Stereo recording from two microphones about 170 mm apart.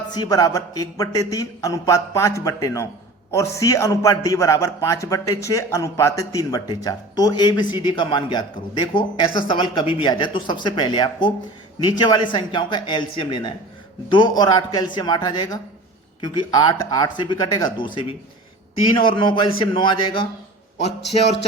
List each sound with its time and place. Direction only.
0.1 s speech: 20° left (ahead or behind)